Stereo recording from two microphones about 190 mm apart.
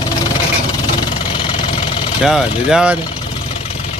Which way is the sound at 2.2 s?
Centre (ahead or behind).